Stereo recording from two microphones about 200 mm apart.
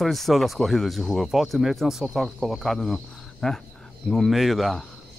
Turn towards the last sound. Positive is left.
turn(degrees=0)  # may be behind; listen again after turning